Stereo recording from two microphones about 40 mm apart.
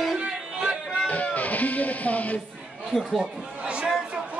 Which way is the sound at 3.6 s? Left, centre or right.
Right.